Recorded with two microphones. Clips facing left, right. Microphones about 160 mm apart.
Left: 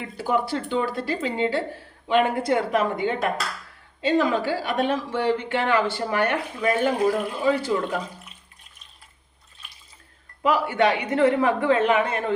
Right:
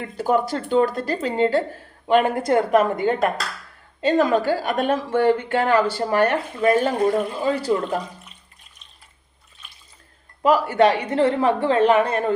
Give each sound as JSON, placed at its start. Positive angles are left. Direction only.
{"t": 0.0, "sound": "a woman's voice", "side_deg": -45}
{"t": 7.0, "sound": "speech", "side_deg": 0}
{"t": 7.4, "sound": "speech", "side_deg": -35}
{"t": 10.4, "sound": "speech", "side_deg": -40}